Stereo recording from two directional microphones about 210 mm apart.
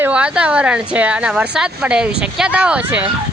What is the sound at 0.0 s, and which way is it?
Speech, 5° right (ahead or behind).